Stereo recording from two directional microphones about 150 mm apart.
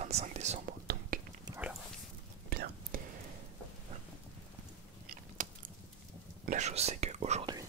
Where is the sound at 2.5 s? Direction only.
90° right.